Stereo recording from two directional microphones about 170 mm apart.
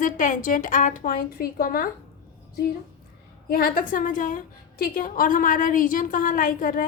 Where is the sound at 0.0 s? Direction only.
50° left (ahead or behind).